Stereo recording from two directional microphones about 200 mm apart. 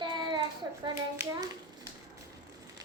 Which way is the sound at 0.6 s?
15° right (ahead or behind).